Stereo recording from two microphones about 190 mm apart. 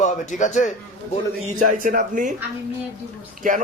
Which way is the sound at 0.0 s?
40° left (ahead or behind).